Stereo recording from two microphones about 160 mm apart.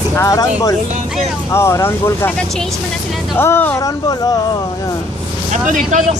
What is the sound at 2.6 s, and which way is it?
Speech, centre (ahead or behind).